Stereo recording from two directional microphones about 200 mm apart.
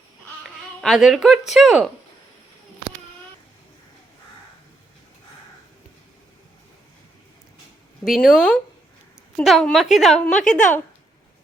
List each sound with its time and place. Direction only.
0.4 s a sound: centre (ahead or behind)
1.5 s a woman's voice: centre (ahead or behind)
8.0 s a woman's voice: centre (ahead or behind)
10.4 s a woman's voice: 40° left (ahead or behind)